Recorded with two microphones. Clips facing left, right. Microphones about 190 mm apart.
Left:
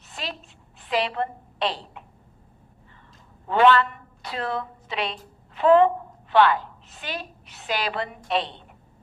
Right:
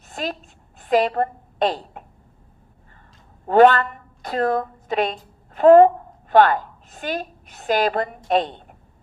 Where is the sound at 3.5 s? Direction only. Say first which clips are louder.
Right 5 dB; 45° right (ahead or behind).